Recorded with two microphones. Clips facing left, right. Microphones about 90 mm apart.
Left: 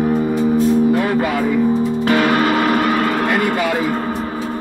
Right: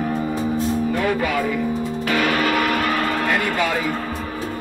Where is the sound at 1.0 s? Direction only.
35° left (ahead or behind).